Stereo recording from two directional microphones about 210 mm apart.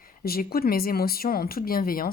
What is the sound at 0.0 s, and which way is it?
Speech, 45° left (ahead or behind).